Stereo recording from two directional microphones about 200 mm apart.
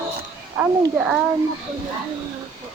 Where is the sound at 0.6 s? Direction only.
10° right (ahead or behind).